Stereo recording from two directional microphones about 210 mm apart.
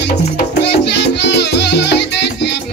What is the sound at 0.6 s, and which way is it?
Music, 55° left (ahead or behind).